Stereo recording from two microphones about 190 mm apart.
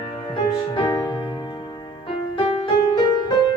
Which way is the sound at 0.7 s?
20° left (ahead or behind).